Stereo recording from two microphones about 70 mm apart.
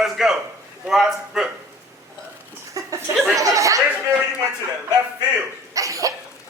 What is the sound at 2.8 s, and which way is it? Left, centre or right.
Chuckle, right.